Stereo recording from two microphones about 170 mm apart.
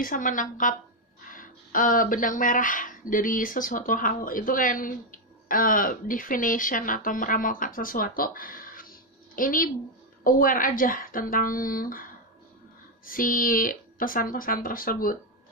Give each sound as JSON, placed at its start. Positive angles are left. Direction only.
{"t": 0.0, "sound": "a woman's voice", "side_deg": 50}